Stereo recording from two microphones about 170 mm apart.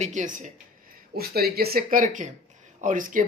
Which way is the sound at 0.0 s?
45° right (ahead or behind).